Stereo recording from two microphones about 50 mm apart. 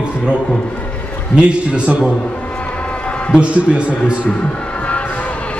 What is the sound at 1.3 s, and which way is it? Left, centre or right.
Speech, right.